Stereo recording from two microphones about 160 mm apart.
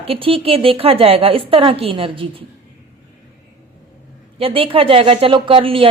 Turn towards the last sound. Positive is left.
turn(degrees=-35)  # may be behind; listen again after turning